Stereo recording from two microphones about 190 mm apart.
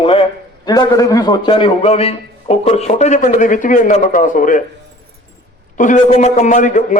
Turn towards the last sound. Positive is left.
turn(degrees=40)  # may be behind; listen again after turning